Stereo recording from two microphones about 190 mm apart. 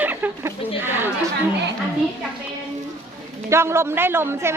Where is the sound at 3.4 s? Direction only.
15° right (ahead or behind).